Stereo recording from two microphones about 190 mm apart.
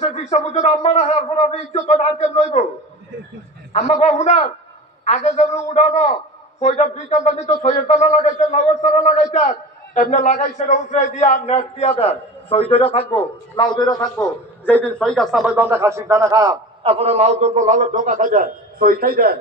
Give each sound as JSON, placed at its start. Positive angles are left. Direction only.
{"t": 0.0, "sound": "a man's voice", "side_deg": 35}
{"t": 3.7, "sound": "a man's voice", "side_deg": 35}
{"t": 16.8, "sound": "a man's voice", "side_deg": -35}